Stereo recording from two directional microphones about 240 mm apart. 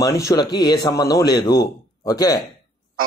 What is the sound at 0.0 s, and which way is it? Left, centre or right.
Speech, centre.